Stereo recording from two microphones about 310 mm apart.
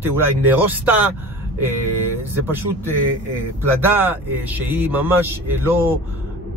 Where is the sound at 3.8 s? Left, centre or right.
Centre.